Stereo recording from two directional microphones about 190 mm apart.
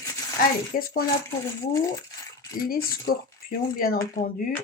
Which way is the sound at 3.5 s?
50° left (ahead or behind).